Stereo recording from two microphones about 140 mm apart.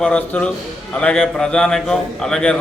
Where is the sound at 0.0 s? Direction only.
10° left (ahead or behind).